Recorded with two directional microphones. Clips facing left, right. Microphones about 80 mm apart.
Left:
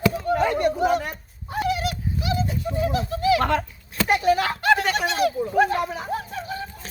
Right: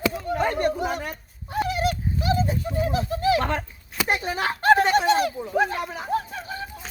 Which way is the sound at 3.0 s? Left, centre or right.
Right.